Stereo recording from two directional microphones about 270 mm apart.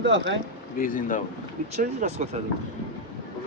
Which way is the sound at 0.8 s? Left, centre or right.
Left.